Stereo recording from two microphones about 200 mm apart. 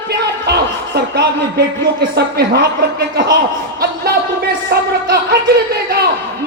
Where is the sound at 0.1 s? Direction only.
55° right (ahead or behind).